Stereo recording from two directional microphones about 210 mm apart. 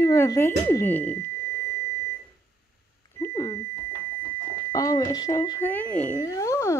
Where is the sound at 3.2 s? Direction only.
15° left (ahead or behind).